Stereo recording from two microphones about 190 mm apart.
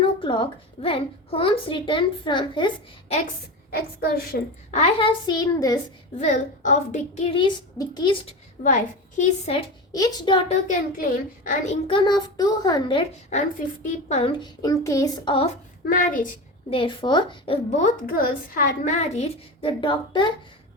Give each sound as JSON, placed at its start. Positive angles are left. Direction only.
{"t": 0.0, "sound": "a woman's voice", "side_deg": 25}
{"t": 4.3, "sound": "a woman's voice", "side_deg": 70}
{"t": 4.7, "sound": "a woman's voice", "side_deg": 35}
{"t": 6.1, "sound": "a woman's voice", "side_deg": 40}
{"t": 8.6, "sound": "a woman's voice", "side_deg": 40}
{"t": 9.9, "sound": "a woman's voice", "side_deg": 20}
{"t": 10.7, "sound": "a woman's voice", "side_deg": 45}
{"t": 11.9, "sound": "a woman's voice", "side_deg": 25}
{"t": 13.3, "sound": "a woman's voice", "side_deg": 40}
{"t": 15.9, "sound": "a woman's voice", "side_deg": 45}
{"t": 16.6, "sound": "a woman's voice", "side_deg": 25}
{"t": 19.6, "sound": "a woman's voice", "side_deg": 25}